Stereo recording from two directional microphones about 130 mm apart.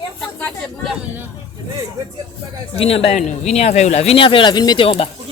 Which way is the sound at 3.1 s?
65° left (ahead or behind).